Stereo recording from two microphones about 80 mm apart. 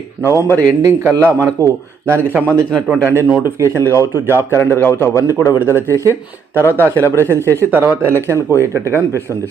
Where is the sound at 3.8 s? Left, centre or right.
Left.